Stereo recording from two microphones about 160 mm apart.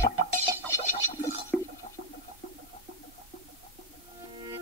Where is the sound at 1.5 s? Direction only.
5° left (ahead or behind).